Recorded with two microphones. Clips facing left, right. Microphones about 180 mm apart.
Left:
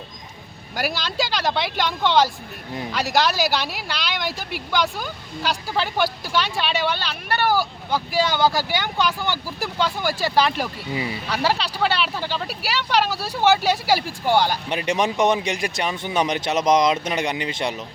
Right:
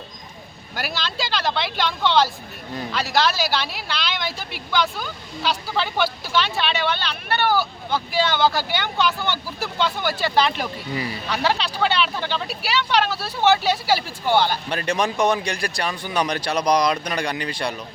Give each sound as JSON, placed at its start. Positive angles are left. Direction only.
{"t": 0.8, "sound": "speech", "side_deg": 10}